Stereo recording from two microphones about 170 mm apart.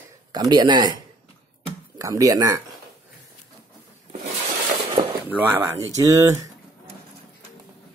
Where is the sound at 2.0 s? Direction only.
20° right (ahead or behind).